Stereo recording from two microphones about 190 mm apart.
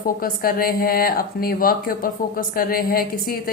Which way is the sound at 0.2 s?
50° left (ahead or behind).